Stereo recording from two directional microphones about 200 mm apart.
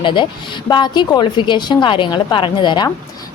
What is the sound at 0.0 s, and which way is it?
A woman's voice, 25° left (ahead or behind).